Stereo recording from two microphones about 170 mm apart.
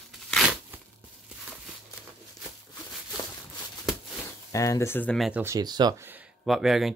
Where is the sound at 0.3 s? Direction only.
5° right (ahead or behind).